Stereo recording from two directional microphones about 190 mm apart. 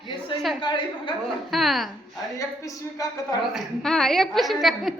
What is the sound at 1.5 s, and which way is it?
Speech, centre (ahead or behind).